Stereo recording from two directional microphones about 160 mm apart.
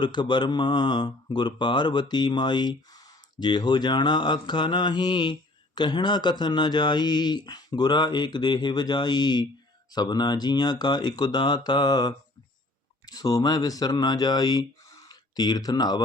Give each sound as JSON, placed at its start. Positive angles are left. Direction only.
{"t": 0.0, "sound": "speech", "side_deg": 30}